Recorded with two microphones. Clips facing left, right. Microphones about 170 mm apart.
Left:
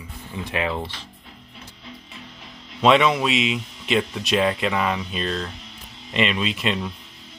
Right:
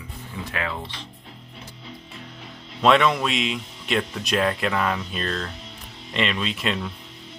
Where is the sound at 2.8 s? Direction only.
Centre (ahead or behind).